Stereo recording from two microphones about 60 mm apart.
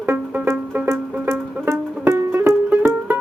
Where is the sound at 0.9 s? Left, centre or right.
Right.